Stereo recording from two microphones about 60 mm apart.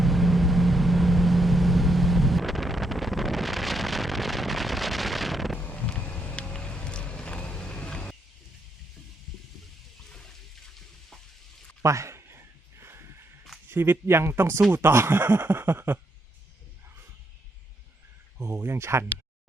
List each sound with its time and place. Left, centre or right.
0.0 s vehicle: centre
5.5 s vehicle: left
10.1 s water: centre
11.8 s a sound: right
13.7 s speech: right
18.6 s speech: right